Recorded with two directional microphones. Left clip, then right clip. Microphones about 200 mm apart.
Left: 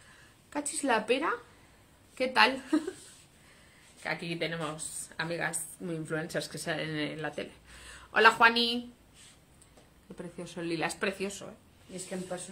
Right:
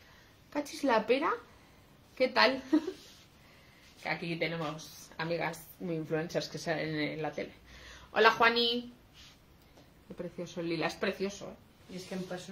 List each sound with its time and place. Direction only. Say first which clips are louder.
0.5 s a woman's voice: even; centre (ahead or behind)
4.0 s a woman's voice: even; 10° left (ahead or behind)
10.1 s speech: right 2 dB; 5° left (ahead or behind)